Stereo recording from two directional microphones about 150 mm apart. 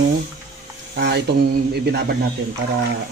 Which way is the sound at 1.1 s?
90° right.